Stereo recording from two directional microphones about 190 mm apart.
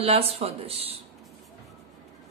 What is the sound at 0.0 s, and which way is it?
Speech, 30° right (ahead or behind).